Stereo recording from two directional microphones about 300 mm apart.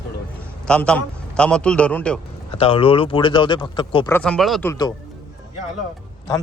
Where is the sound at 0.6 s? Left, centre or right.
Centre.